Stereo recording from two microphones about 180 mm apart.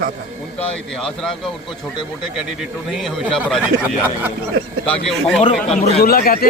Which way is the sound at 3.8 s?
10° right (ahead or behind).